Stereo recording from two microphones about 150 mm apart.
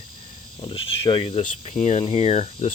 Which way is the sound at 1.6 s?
45° left (ahead or behind).